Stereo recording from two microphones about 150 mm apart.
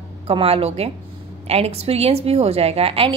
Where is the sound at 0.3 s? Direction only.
40° right (ahead or behind).